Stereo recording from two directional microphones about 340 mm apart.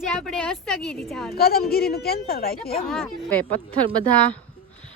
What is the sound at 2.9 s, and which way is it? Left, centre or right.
Speech, centre.